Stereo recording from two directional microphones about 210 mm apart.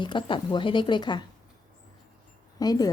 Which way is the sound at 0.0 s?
25° left (ahead or behind).